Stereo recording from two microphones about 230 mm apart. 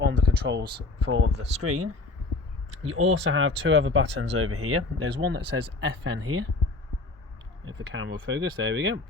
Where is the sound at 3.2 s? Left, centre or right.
Right.